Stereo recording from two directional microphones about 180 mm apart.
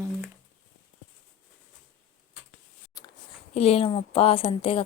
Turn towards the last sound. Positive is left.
turn(degrees=30)  # may be behind; listen again after turning